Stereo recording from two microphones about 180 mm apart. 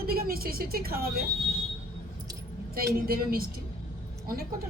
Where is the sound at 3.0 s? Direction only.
55° right (ahead or behind).